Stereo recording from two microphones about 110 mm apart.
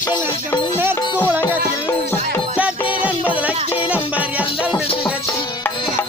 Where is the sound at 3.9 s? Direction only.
10° right (ahead or behind).